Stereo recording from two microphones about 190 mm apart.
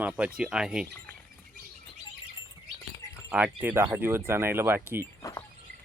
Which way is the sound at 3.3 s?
10° right (ahead or behind).